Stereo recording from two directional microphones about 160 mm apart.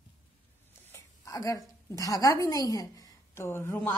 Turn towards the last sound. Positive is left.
turn(degrees=15)  # may be behind; listen again after turning